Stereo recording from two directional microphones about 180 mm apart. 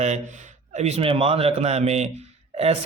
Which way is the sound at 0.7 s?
40° right (ahead or behind).